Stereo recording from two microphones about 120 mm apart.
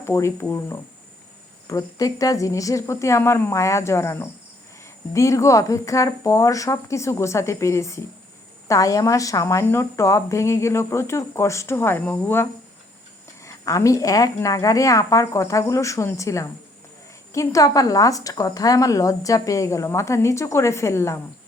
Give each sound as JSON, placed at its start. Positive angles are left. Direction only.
{"t": 0.0, "sound": "speech", "side_deg": 25}
{"t": 1.6, "sound": "speech", "side_deg": 30}
{"t": 13.4, "sound": "speech", "side_deg": 25}